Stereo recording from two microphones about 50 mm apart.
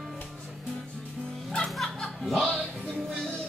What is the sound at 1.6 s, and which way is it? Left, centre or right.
Music, centre.